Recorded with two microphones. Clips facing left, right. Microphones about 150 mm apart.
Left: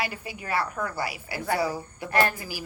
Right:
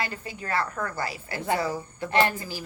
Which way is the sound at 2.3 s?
10° left (ahead or behind).